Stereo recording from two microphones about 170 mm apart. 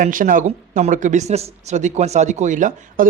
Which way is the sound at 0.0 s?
50° right (ahead or behind).